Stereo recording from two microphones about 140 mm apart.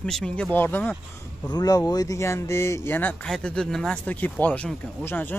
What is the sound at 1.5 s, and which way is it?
Speech, 25° left (ahead or behind).